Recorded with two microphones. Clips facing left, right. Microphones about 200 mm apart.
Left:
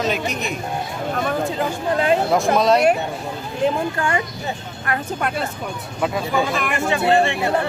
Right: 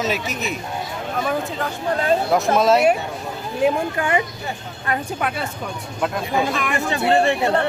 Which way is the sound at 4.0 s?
20° right (ahead or behind).